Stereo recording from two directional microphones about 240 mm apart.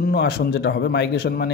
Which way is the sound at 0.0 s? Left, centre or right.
Left.